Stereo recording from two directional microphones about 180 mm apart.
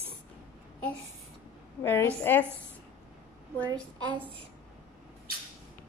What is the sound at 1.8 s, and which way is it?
Speech, 10° left (ahead or behind).